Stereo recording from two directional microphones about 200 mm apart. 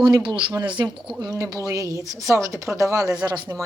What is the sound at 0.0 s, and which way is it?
Speech, 20° right (ahead or behind).